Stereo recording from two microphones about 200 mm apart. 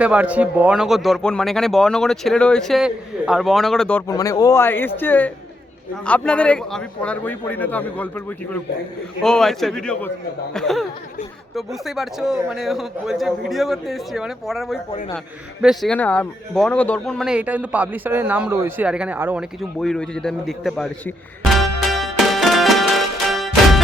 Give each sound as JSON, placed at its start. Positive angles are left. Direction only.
{"t": 0.0, "sound": "speech", "side_deg": -5}
{"t": 4.1, "sound": "a man's voice", "side_deg": 15}